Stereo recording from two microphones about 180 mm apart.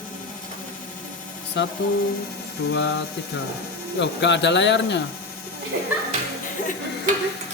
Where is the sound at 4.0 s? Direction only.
75° left (ahead or behind).